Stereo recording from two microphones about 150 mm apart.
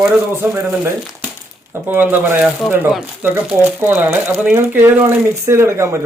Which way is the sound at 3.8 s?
15° right (ahead or behind).